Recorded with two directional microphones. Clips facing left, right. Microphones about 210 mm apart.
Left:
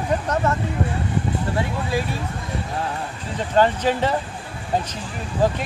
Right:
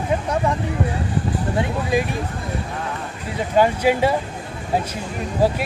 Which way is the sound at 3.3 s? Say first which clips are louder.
Right 1 dB; 10° right (ahead or behind).